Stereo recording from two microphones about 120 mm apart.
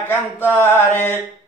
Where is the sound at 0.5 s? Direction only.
20° left (ahead or behind).